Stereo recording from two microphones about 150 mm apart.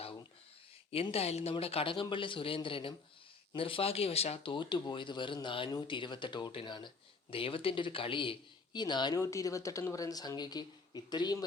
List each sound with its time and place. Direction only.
0.9 s speech: 40° left (ahead or behind)